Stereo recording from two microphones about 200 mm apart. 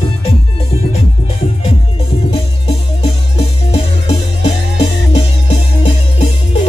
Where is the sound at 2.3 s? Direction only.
30° left (ahead or behind).